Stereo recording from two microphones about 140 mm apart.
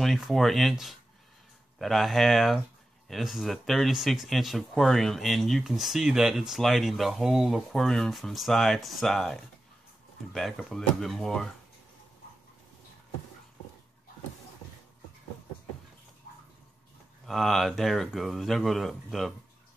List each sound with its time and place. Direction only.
0.0 s speech: centre (ahead or behind)
17.3 s speech: centre (ahead or behind)